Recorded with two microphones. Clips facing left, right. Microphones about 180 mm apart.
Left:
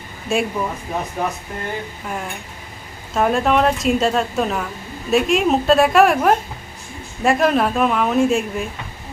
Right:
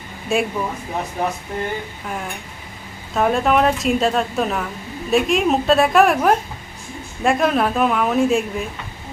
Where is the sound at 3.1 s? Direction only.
Centre (ahead or behind).